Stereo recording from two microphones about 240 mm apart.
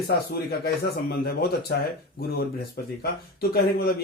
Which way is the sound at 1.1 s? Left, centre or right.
Left.